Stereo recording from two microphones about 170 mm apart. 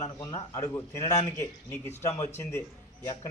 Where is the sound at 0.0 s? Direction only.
20° left (ahead or behind).